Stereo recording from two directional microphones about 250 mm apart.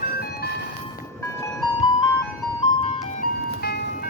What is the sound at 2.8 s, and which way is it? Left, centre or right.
Music, left.